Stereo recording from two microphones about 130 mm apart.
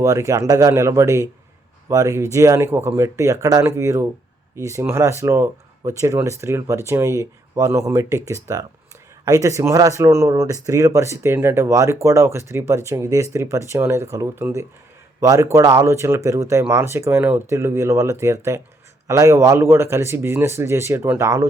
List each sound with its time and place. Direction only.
0.0 s speech: 25° right (ahead or behind)